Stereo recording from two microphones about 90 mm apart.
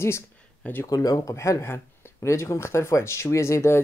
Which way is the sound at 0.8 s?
45° left (ahead or behind).